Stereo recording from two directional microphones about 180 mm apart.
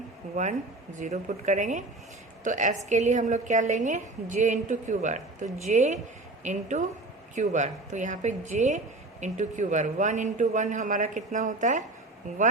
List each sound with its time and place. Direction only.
0.4 s a woman's voice: 40° right (ahead or behind)